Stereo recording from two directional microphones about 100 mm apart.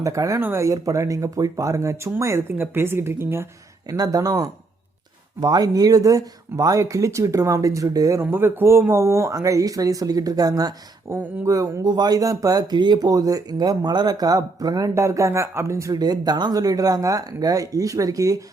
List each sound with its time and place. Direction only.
0.0 s speech: 30° right (ahead or behind)
3.8 s speech: 40° right (ahead or behind)
8.2 s speech: 25° right (ahead or behind); by 10.8 s 40° right (ahead or behind)
11.1 s speech: 30° right (ahead or behind)
16.0 s speech: 45° right (ahead or behind)